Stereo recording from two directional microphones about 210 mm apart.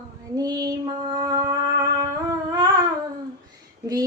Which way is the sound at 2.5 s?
20° right (ahead or behind).